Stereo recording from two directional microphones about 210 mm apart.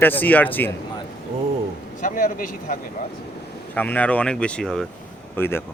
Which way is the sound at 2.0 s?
40° left (ahead or behind).